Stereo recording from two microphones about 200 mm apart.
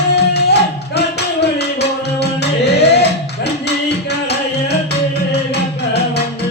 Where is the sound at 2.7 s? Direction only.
55° left (ahead or behind).